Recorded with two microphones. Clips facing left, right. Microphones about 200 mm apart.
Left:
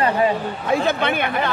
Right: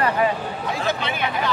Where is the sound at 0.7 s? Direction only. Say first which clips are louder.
Left 7 dB; 55° left (ahead or behind).